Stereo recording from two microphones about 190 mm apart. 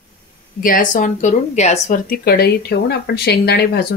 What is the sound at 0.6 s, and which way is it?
Speech, 45° left (ahead or behind).